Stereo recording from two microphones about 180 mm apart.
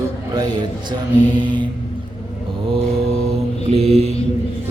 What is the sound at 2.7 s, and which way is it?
Mantra, 35° right (ahead or behind).